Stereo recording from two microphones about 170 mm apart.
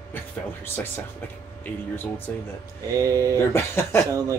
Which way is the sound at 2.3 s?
10° left (ahead or behind).